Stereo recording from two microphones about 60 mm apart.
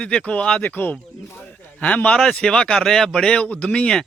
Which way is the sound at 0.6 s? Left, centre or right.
Left.